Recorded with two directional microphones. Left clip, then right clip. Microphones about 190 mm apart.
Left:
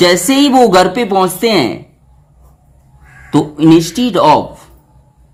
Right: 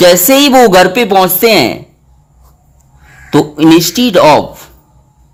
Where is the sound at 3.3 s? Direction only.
35° right (ahead or behind).